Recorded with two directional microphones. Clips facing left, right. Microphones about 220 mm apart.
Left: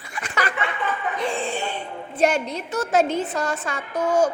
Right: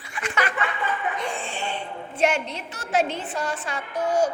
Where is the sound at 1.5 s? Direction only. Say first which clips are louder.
Left 5 dB; 40° left (ahead or behind).